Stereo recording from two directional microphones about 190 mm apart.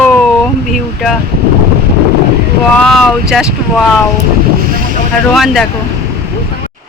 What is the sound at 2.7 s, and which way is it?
Speech, 5° left (ahead or behind).